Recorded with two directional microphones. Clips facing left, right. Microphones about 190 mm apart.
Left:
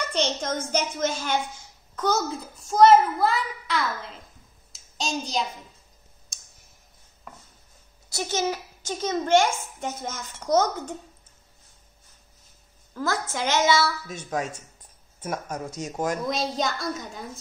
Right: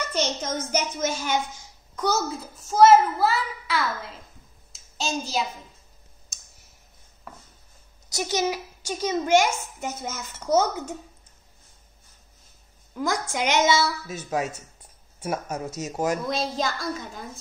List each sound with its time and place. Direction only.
0.1 s a sound: 5° right (ahead or behind)
0.7 s a child's voice: 10° right (ahead or behind)
8.1 s a child's voice: 15° right (ahead or behind)
12.9 s a child's voice: 15° right (ahead or behind)
14.0 s a child's voice: 5° right (ahead or behind)